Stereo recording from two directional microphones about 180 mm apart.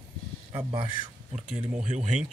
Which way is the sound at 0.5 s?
30° right (ahead or behind).